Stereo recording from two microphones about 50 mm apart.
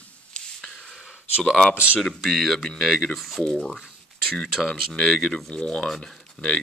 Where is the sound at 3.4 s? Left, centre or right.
Centre.